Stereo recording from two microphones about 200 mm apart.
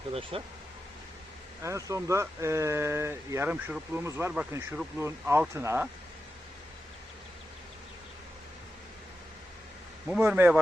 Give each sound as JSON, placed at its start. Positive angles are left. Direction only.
{"t": 0.1, "sound": "speech", "side_deg": -25}
{"t": 1.6, "sound": "speech", "side_deg": -15}
{"t": 10.2, "sound": "speech", "side_deg": -10}